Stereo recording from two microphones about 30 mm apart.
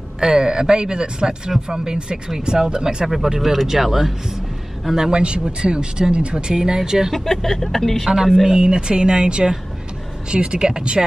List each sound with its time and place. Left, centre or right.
0.2 s speech: right
3.1 s speech: centre
5.1 s speech: right; by 7.1 s centre
7.2 s speech: centre
8.5 s speech: right